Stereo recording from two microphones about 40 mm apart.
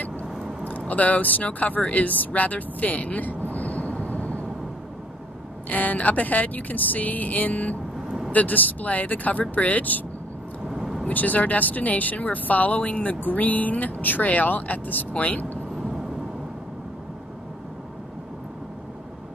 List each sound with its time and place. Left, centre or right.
0.7 s speech: left
3.5 s vehicle: left
5.7 s speech: left
10.7 s vehicle: centre
11.1 s speech: left